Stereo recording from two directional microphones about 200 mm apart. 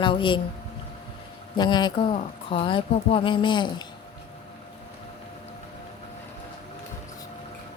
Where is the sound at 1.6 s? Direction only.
20° left (ahead or behind).